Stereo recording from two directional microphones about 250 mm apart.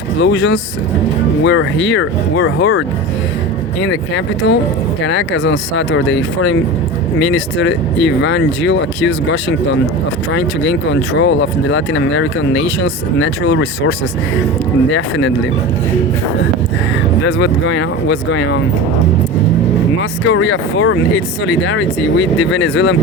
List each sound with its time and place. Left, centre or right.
0.2 s speech: left
14.9 s speech: left
17.2 s speech: left
20.0 s speech: left